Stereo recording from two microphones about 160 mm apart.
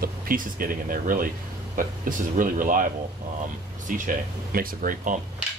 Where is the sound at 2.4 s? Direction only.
55° right (ahead or behind).